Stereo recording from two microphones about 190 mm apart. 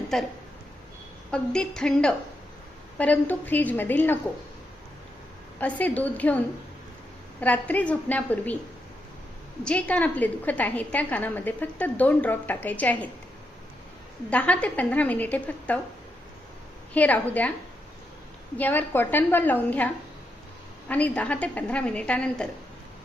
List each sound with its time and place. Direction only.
0.1 s a woman's voice: centre (ahead or behind)
1.3 s a woman's voice: 5° left (ahead or behind)
5.5 s a woman's voice: 10° left (ahead or behind)
9.6 s a woman's voice: 5° left (ahead or behind)
14.3 s a woman's voice: 5° left (ahead or behind)
16.9 s a woman's voice: 10° left (ahead or behind)
18.5 s a woman's voice: 10° left (ahead or behind)